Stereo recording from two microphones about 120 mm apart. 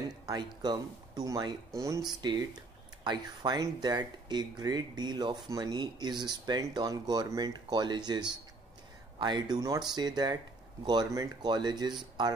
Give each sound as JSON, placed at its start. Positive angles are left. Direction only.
{"t": 0.3, "sound": "speech", "side_deg": -35}
{"t": 9.2, "sound": "speech", "side_deg": -35}